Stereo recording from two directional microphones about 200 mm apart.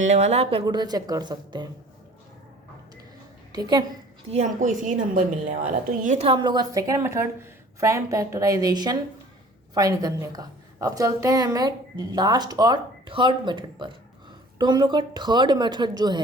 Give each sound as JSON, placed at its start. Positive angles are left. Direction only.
{"t": 0.0, "sound": "a woman's voice", "side_deg": -35}
{"t": 3.5, "sound": "a woman's voice", "side_deg": -20}
{"t": 4.3, "sound": "a woman's voice", "side_deg": -35}
{"t": 6.2, "sound": "a woman's voice", "side_deg": -25}